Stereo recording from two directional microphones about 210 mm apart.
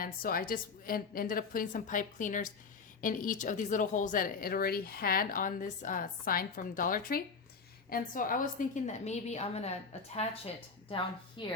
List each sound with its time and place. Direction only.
0.0 s a woman's voice: 45° left (ahead or behind); by 11.4 s 25° left (ahead or behind)